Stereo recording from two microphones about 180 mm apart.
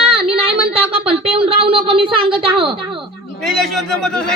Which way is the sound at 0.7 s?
30° right (ahead or behind).